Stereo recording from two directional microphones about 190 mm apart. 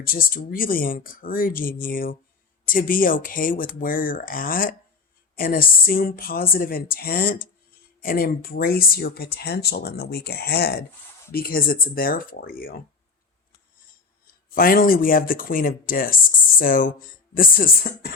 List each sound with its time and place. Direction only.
0.0 s speech: 50° left (ahead or behind)
14.5 s speech: 50° left (ahead or behind)